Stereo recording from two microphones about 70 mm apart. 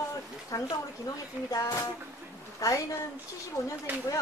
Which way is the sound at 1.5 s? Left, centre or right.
Left.